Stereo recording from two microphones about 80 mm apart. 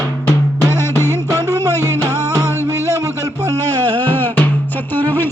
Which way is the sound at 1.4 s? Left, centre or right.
Right.